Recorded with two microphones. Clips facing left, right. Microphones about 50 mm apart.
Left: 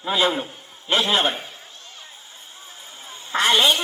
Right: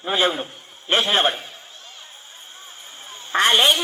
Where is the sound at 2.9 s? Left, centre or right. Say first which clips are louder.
Right 2 dB; right.